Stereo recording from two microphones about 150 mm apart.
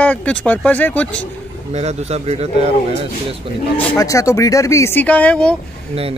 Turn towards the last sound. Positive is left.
turn(degrees=5)  # may be behind; listen again after turning